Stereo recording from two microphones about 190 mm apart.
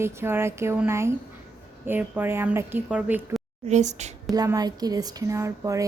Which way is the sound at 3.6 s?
40° right (ahead or behind).